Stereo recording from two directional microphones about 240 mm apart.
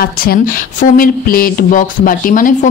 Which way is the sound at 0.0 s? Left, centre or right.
Left.